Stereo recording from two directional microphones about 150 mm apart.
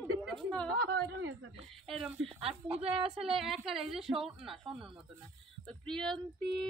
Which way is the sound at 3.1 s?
5° right (ahead or behind).